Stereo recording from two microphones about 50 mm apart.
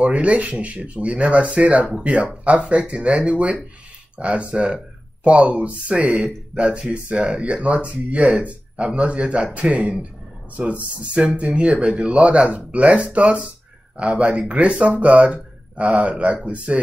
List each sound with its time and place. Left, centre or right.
0.0 s speech: right